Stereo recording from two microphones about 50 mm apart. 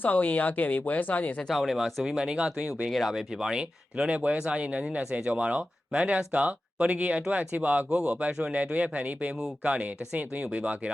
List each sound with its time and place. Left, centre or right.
0.0 s speech: left
1.5 s speech: centre
2.9 s speech: centre; by 7.9 s right
7.9 s speech: right